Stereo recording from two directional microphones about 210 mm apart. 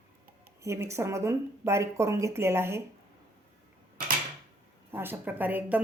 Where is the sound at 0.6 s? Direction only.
15° right (ahead or behind).